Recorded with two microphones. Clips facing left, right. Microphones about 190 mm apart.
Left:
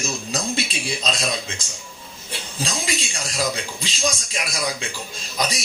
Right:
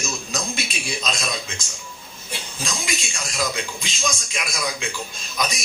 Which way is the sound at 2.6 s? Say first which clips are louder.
Left 3 dB; 35° left (ahead or behind).